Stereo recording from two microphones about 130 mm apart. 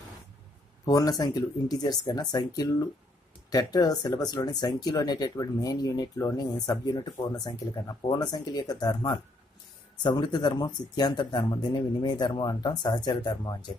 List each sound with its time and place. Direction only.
0.8 s speech: 30° left (ahead or behind)